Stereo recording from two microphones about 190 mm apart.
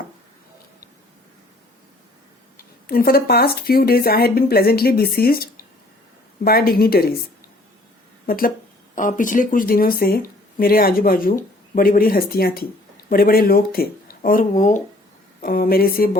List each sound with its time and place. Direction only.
2.8 s speech: 50° left (ahead or behind)
8.3 s speech: 50° left (ahead or behind)